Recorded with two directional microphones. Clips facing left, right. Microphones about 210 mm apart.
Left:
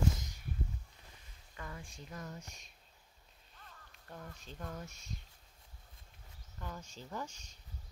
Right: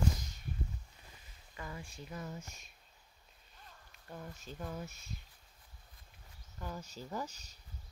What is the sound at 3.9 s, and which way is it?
Speech, 5° right (ahead or behind).